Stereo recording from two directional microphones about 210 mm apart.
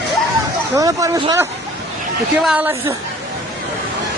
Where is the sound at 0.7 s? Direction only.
15° right (ahead or behind).